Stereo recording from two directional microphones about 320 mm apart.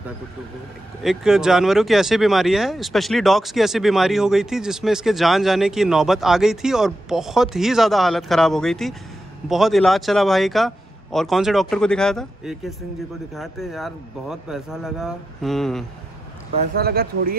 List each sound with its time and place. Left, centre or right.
1.0 s speech: centre
16.5 s speech: right